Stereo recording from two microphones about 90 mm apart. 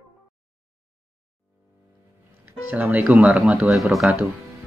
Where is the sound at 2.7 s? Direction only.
20° right (ahead or behind).